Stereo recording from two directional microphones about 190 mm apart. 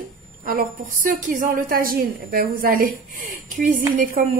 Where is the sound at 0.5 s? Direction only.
45° right (ahead or behind).